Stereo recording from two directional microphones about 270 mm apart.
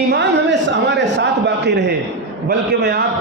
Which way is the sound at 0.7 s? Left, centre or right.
Right.